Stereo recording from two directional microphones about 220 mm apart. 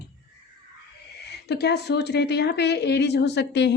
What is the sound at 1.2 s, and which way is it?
A woman's voice, 50° left (ahead or behind).